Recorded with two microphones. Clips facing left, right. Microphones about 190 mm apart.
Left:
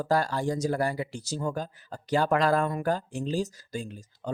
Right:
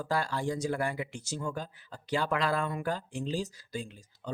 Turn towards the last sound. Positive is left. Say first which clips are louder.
# left 4 dB
turn(degrees=45)  # may be behind; listen again after turning